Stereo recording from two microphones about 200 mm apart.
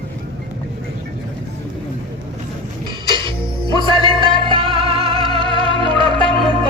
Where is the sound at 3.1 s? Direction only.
25° right (ahead or behind).